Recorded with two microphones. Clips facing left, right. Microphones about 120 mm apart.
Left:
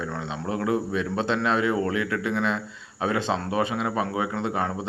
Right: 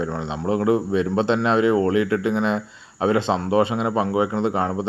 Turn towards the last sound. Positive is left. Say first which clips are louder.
# right 5 dB
turn(degrees=-25)  # may be behind; listen again after turning